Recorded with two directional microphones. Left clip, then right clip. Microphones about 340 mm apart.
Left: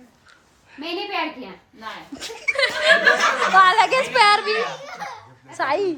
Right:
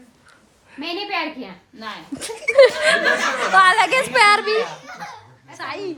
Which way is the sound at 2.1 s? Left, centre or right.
Centre.